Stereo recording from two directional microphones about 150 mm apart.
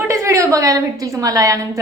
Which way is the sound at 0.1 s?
20° right (ahead or behind).